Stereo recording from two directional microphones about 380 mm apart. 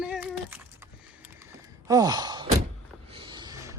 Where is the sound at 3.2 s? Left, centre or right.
Centre.